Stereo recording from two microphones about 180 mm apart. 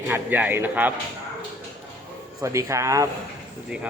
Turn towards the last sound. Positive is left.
turn(degrees=-15)  # may be behind; listen again after turning